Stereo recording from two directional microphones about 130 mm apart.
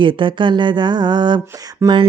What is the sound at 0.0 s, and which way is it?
Speech, 40° right (ahead or behind).